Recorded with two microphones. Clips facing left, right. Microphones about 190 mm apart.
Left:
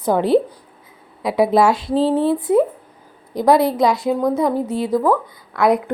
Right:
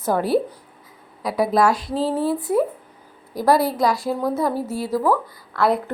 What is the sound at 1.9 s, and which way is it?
Speech, centre (ahead or behind).